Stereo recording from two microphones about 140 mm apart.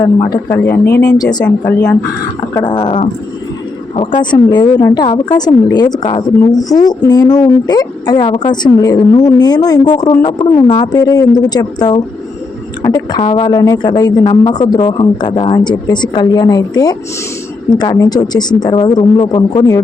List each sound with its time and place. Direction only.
0.5 s speech: 15° left (ahead or behind)
1.2 s a woman's voice: 30° left (ahead or behind)
2.6 s a woman's voice: 30° left (ahead or behind)